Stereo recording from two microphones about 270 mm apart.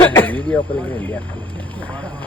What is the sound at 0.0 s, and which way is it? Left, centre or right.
Speech, centre.